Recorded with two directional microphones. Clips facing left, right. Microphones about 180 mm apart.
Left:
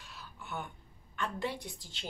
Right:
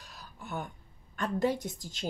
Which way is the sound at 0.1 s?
40° right (ahead or behind).